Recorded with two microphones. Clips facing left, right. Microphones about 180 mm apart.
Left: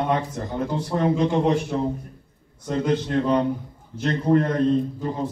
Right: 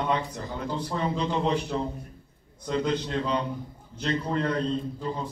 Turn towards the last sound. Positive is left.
turn(degrees=45)  # may be behind; listen again after turning